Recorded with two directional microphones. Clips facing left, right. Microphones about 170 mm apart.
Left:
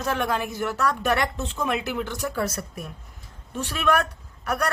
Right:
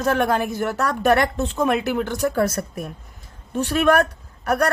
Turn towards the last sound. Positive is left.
turn(degrees=-40)  # may be behind; listen again after turning